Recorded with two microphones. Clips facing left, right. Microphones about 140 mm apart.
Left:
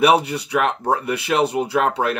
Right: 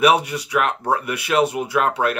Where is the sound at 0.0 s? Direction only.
30° left (ahead or behind).